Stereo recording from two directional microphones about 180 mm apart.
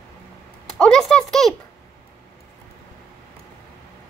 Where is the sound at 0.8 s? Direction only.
5° left (ahead or behind).